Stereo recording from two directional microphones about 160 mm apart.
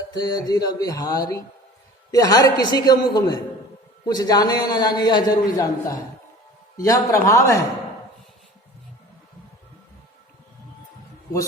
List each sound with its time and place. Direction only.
0.1 s a man's voice: 25° left (ahead or behind)